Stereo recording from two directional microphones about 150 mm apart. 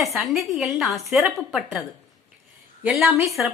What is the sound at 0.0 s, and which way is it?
A woman's voice, centre (ahead or behind).